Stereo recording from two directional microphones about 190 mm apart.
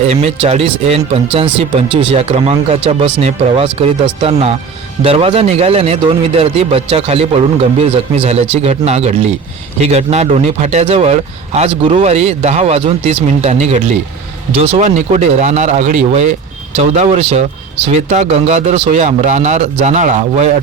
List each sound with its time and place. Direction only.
0.1 s a man's voice: 35° right (ahead or behind)